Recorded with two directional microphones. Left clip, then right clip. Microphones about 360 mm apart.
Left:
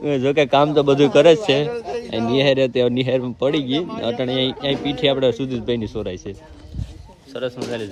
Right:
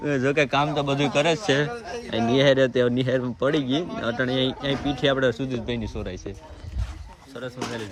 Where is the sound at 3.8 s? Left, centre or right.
Centre.